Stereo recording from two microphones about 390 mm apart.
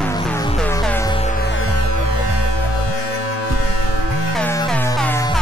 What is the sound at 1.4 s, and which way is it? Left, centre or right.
Music, left.